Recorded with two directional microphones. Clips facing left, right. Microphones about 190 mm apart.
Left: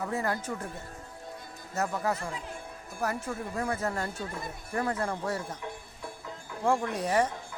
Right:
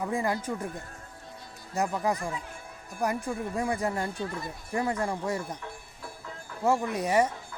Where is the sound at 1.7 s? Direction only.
15° right (ahead or behind).